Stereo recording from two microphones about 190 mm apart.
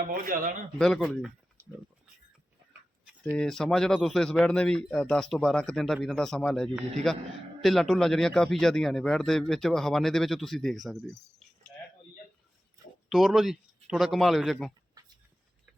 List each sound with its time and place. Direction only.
0.1 s speech: 50° right (ahead or behind)
0.8 s speech: 5° left (ahead or behind)
3.3 s speech: centre (ahead or behind)
13.1 s speech: centre (ahead or behind)